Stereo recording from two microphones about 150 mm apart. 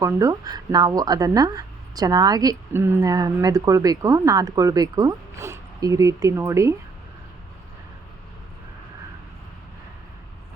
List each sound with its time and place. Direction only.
0.0 s speech: 20° right (ahead or behind)